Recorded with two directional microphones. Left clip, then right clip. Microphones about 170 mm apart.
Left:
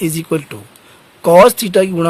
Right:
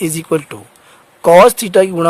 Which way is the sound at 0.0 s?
50° right (ahead or behind).